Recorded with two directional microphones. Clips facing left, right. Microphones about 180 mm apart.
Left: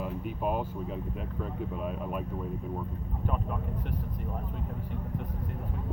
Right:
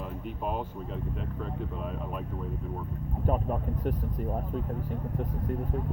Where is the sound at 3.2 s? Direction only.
40° right (ahead or behind).